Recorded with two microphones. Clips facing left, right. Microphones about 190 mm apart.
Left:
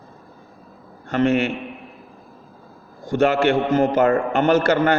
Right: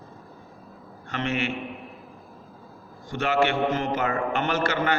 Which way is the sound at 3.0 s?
45° left (ahead or behind).